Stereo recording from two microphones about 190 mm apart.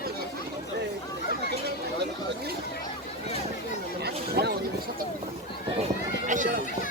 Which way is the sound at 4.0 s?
55° right (ahead or behind).